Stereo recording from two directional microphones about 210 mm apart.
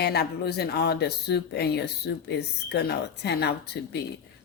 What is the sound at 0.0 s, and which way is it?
Speech, 50° left (ahead or behind).